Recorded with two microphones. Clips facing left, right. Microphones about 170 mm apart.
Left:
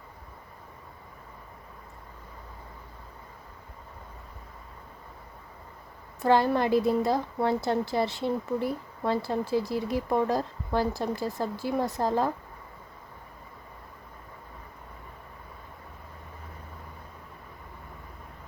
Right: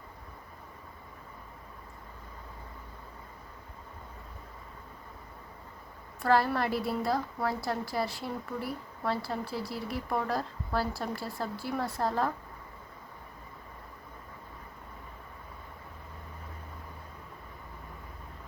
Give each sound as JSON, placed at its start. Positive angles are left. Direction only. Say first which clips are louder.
{"t": 6.2, "sound": "a woman's voice", "louder": "left 4 dB", "side_deg": 20}